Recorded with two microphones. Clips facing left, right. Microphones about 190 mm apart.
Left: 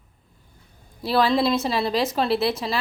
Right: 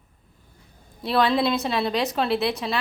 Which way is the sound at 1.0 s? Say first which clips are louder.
Left 1 dB; centre (ahead or behind).